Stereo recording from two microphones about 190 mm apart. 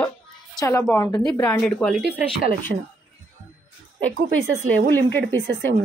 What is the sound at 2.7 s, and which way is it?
Speech, 55° right (ahead or behind).